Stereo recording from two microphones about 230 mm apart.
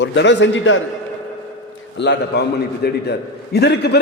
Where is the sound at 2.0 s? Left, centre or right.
Left.